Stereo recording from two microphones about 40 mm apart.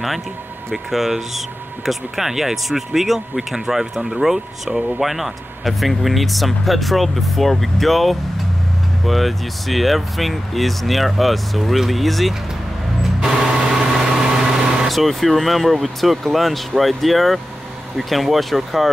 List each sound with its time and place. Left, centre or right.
0.7 s speech: centre
5.0 s speech: centre
13.0 s vehicle: centre
14.9 s speech: centre